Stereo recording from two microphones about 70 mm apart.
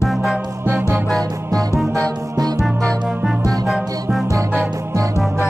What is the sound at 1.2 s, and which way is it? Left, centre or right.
Music, right.